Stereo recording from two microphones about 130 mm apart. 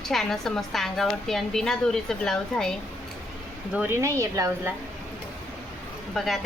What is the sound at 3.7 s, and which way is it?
Speech, 15° right (ahead or behind).